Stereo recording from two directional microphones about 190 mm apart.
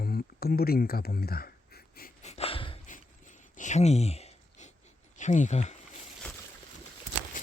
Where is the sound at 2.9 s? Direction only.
40° left (ahead or behind).